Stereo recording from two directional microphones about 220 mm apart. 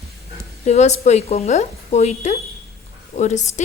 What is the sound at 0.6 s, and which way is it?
A woman's voice, 30° left (ahead or behind).